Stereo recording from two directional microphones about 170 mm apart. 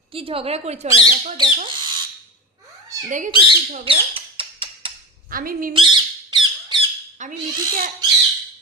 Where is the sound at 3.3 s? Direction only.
30° right (ahead or behind).